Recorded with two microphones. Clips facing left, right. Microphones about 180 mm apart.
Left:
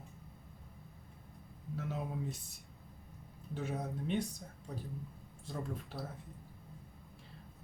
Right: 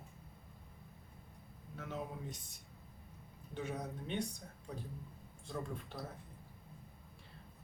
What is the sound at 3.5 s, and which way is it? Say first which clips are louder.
Speech: left 2 dB; 5° left (ahead or behind).